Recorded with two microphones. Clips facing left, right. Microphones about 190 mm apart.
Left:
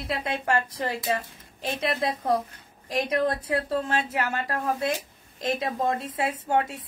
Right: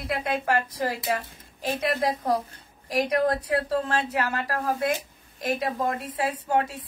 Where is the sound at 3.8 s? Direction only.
20° left (ahead or behind).